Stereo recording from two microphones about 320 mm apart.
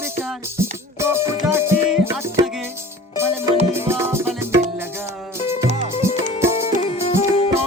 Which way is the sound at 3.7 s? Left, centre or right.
Centre.